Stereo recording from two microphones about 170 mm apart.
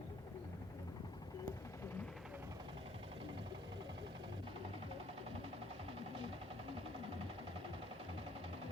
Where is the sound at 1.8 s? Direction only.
10° left (ahead or behind).